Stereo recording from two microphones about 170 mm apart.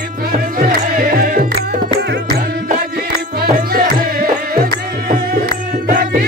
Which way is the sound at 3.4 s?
60° right (ahead or behind).